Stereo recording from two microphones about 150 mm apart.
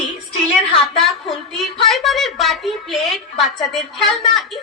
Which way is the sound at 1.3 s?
Centre (ahead or behind).